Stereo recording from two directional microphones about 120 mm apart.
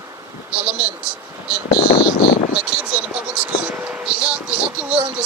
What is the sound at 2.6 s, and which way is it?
Vehicle, 10° right (ahead or behind).